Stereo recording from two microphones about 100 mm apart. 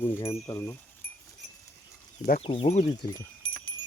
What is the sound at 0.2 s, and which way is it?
Speech, 75° left (ahead or behind).